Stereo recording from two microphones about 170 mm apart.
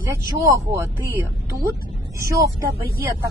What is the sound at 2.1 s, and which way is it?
Speech, 20° right (ahead or behind).